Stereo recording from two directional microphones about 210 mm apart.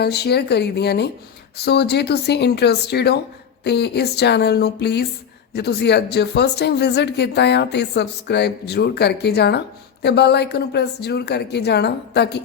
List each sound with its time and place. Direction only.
0.0 s speech: 50° left (ahead or behind)